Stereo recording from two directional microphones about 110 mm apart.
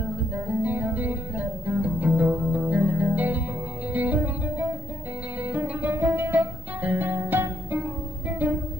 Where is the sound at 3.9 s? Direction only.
15° right (ahead or behind).